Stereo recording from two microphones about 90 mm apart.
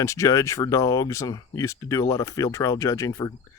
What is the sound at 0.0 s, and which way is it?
Speech, 35° left (ahead or behind).